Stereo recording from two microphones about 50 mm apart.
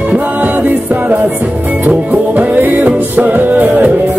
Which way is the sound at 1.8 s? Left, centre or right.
Right.